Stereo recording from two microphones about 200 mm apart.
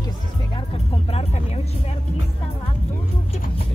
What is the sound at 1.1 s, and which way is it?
Music, 30° left (ahead or behind).